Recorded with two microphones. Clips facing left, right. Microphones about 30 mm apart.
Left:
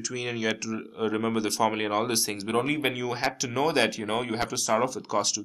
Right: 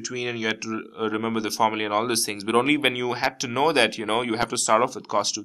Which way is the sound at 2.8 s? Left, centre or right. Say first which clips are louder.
Right 4 dB; right.